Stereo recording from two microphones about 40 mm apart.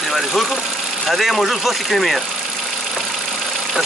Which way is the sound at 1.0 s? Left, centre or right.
Centre.